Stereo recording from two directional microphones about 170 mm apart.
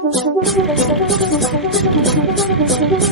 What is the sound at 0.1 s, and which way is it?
Music, centre (ahead or behind).